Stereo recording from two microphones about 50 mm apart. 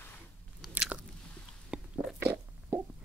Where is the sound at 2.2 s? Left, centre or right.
Right.